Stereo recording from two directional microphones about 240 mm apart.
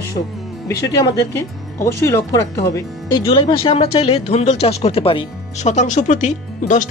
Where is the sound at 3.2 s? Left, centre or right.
Left.